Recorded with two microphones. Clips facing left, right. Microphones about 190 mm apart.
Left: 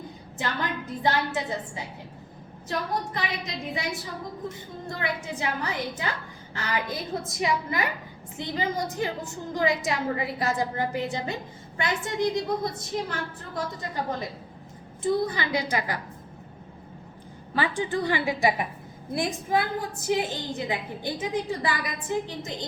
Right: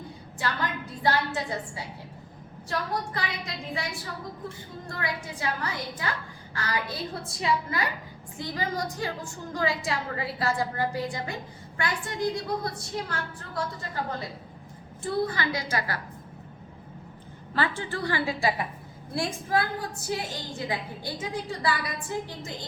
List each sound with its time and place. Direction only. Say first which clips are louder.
1.0 s a woman's voice: even; 20° left (ahead or behind)
4.9 s a woman's voice: left 3 dB; 20° left (ahead or behind)
17.5 s a woman's voice: left 3 dB; 15° left (ahead or behind)